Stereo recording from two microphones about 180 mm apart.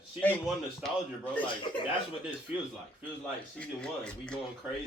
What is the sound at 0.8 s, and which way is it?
Speech, 10° left (ahead or behind).